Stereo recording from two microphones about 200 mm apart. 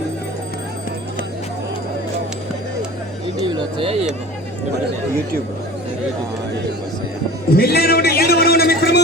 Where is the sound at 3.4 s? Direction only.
25° right (ahead or behind).